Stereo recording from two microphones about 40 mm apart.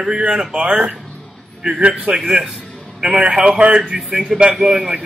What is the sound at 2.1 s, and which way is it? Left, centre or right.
Speech, right.